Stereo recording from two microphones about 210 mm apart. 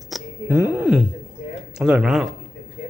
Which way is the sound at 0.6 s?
5° right (ahead or behind).